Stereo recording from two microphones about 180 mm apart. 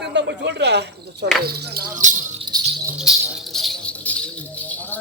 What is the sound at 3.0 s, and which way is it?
Speech, centre (ahead or behind).